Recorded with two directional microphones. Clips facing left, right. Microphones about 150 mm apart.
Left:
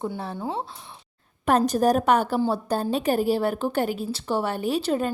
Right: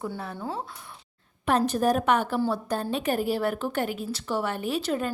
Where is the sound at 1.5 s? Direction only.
40° left (ahead or behind).